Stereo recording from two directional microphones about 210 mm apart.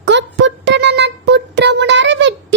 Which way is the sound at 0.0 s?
55° right (ahead or behind).